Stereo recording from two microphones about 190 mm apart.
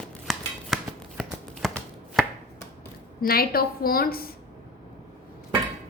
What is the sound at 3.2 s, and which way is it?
A woman's voice, 50° left (ahead or behind).